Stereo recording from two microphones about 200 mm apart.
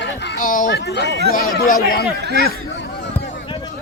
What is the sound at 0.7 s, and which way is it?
A man's voice, 60° left (ahead or behind).